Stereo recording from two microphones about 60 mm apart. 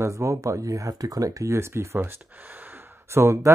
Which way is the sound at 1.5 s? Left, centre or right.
Right.